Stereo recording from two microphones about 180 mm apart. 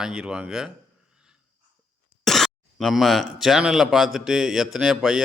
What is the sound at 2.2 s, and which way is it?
Speech, centre (ahead or behind).